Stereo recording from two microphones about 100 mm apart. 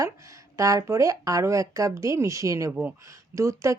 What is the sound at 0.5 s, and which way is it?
Speech, 30° right (ahead or behind).